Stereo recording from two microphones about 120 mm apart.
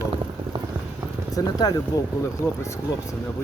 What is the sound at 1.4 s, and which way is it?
Speech, 30° left (ahead or behind).